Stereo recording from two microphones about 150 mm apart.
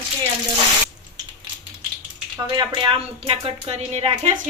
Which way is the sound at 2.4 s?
25° right (ahead or behind).